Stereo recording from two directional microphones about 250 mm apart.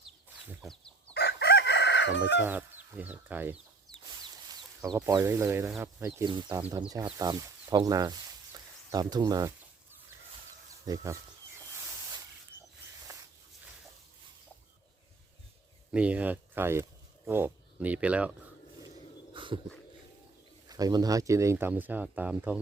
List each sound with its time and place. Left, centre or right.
0.0 s chicken: centre
1.1 s chicken: left
2.4 s speech: centre
4.8 s speech: centre
10.8 s speech: centre
15.9 s speech: centre
19.3 s a sound: centre
20.7 s speech: centre